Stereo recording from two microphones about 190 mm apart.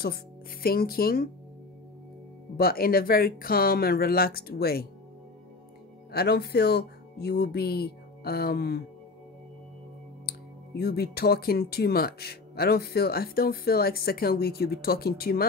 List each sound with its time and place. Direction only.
0.0 s speech: 55° left (ahead or behind)
2.5 s speech: 50° left (ahead or behind)
6.1 s speech: 55° left (ahead or behind)
10.8 s speech: 55° left (ahead or behind)